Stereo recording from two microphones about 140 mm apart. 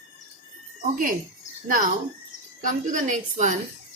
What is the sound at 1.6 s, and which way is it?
A woman's voice, 70° right (ahead or behind).